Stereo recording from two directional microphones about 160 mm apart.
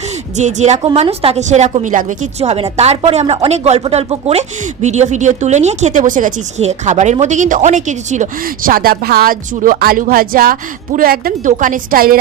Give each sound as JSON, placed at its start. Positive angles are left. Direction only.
{"t": 0.3, "sound": "a woman's voice", "side_deg": -45}